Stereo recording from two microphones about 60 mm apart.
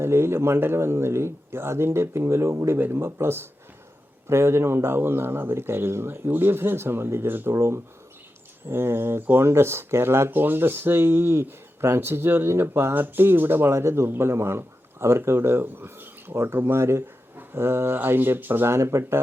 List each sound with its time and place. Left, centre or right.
0.0 s speech: right
7.5 s speech: right